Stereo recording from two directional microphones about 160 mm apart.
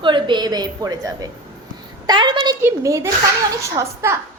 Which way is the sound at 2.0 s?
30° right (ahead or behind).